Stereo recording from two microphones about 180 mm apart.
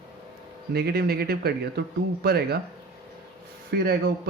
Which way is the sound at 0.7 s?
60° right (ahead or behind).